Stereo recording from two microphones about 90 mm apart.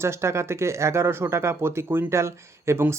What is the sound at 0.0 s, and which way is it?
Speech, 30° right (ahead or behind).